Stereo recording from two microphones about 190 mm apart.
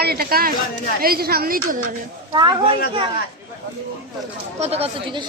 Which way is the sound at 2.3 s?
20° right (ahead or behind).